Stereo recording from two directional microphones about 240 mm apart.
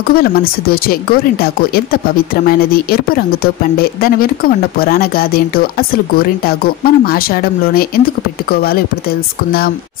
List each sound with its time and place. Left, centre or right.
0.0 s speech: left